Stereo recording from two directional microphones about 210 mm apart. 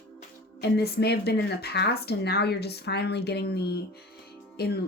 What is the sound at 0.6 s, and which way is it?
Speech, 50° left (ahead or behind).